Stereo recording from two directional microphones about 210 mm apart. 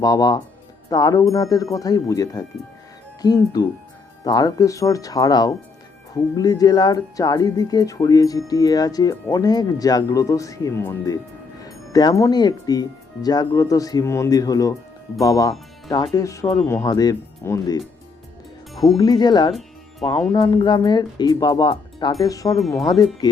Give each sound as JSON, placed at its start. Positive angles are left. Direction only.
{"t": 0.0, "sound": "speech", "side_deg": 15}
{"t": 18.9, "sound": "speech", "side_deg": 20}